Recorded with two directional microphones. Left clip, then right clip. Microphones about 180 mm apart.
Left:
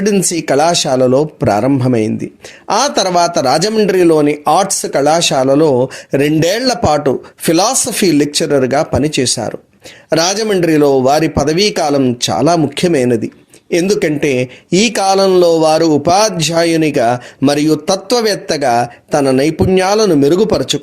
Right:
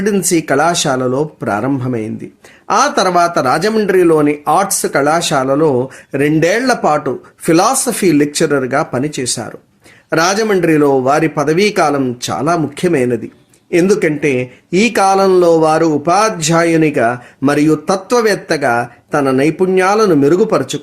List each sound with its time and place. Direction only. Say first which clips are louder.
0.0 s speech: even; 35° left (ahead or behind)